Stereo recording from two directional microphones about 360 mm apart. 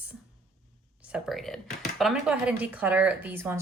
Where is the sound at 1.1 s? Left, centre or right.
Centre.